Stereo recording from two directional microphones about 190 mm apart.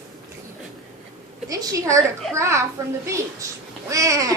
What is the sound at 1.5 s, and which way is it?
A woman's voice, 20° right (ahead or behind).